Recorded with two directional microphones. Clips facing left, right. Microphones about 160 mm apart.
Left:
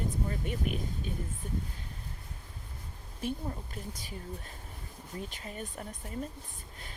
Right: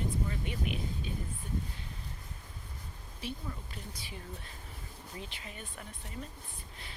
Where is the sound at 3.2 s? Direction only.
45° left (ahead or behind).